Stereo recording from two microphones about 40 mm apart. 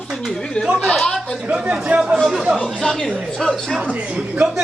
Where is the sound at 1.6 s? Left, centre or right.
Right.